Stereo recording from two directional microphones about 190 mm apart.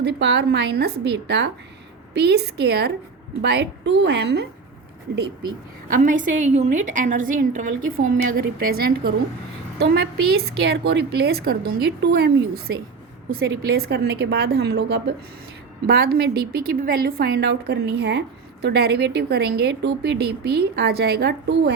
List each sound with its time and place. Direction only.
0.0 s a woman's voice: 65° right (ahead or behind)
5.9 s a woman's voice: 45° right (ahead or behind); by 21.7 s 60° right (ahead or behind)